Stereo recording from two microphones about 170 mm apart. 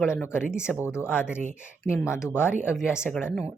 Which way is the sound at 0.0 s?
15° left (ahead or behind).